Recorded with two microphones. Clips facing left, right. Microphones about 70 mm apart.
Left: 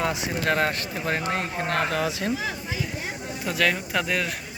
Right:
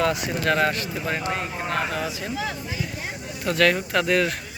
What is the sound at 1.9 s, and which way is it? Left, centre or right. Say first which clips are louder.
Speech: left 3 dB; left.